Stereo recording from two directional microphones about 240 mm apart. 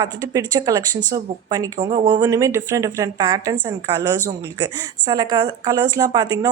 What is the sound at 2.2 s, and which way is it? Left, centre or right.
Speech, centre.